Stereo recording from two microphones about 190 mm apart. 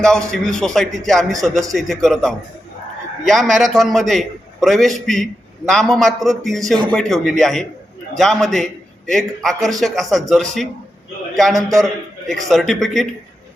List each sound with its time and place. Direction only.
0.3 s a man's voice: 5° left (ahead or behind)
11.5 s a man's voice: 20° right (ahead or behind)
12.2 s a man's voice: centre (ahead or behind)